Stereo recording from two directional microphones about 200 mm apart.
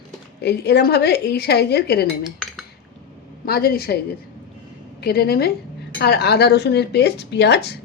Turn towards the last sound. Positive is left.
turn(degrees=55)  # may be behind; listen again after turning